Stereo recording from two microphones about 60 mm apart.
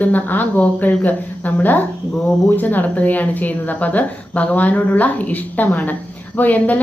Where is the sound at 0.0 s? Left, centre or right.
Left.